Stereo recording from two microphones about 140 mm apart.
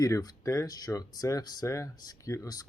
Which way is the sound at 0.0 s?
25° left (ahead or behind).